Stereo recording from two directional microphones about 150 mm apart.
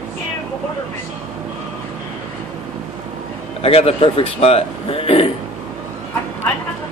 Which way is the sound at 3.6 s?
40° left (ahead or behind).